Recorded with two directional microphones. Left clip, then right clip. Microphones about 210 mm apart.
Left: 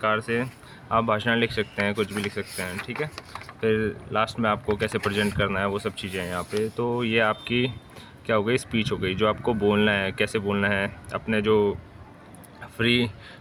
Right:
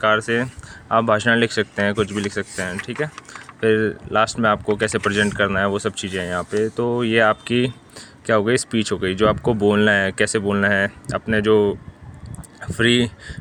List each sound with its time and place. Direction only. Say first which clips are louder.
0.0 s speech: right 6 dB; 35° right (ahead or behind)